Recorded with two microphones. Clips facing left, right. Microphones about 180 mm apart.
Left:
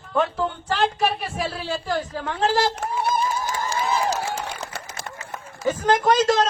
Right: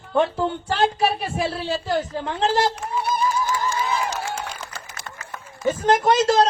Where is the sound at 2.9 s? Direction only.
50° left (ahead or behind).